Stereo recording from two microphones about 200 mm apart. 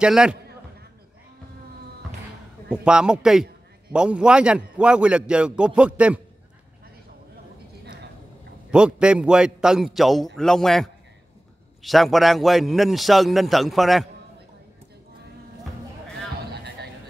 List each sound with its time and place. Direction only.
0.0 s a man's voice: 5° right (ahead or behind)
2.7 s a man's voice: 5° right (ahead or behind)
8.6 s a man's voice: 5° right (ahead or behind)
16.5 s a sound: 55° right (ahead or behind)